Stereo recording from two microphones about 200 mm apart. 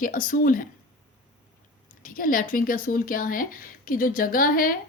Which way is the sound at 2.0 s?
45° left (ahead or behind).